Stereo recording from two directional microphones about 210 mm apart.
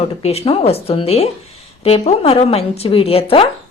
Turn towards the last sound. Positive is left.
turn(degrees=25)  # may be behind; listen again after turning